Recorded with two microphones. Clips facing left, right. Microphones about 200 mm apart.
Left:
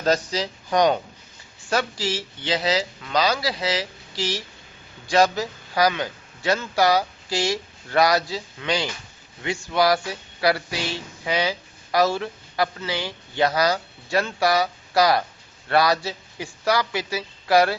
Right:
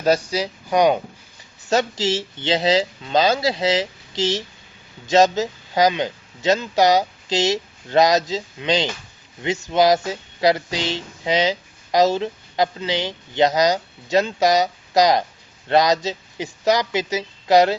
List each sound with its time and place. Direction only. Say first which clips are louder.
0.0 s speech: right 3 dB; 10° right (ahead or behind)
1.7 s speech: right 5 dB; 25° right (ahead or behind)